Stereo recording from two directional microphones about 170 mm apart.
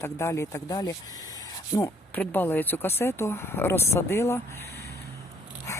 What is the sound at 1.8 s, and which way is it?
Speech, 10° left (ahead or behind).